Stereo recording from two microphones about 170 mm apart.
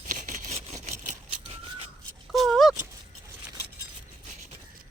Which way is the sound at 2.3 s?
Centre (ahead or behind).